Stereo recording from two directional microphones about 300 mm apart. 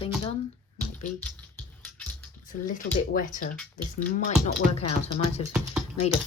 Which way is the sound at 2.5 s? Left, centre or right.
Left.